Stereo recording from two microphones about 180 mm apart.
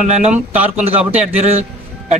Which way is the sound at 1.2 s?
35° right (ahead or behind).